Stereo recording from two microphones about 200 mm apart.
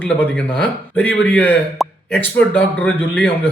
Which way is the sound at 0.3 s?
5° left (ahead or behind).